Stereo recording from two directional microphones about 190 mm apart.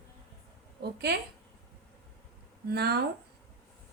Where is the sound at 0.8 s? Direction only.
60° right (ahead or behind).